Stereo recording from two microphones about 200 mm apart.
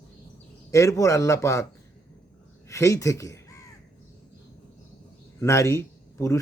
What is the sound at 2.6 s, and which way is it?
Crow, 15° left (ahead or behind).